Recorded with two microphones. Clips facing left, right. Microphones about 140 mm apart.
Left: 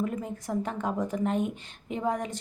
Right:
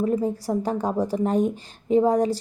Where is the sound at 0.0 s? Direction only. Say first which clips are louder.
Right 9 dB; 35° right (ahead or behind).